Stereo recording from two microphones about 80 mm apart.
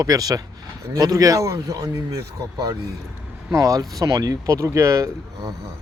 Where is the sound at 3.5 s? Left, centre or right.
Right.